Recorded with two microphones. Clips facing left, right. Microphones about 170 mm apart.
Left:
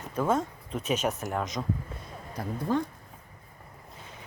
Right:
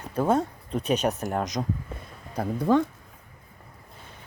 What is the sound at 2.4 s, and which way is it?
Speech, 80° right.